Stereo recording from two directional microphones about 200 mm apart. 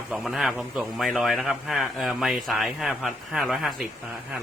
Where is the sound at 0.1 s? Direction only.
Centre (ahead or behind).